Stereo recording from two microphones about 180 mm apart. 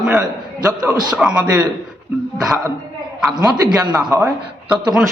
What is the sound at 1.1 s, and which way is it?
Speech, 5° right (ahead or behind).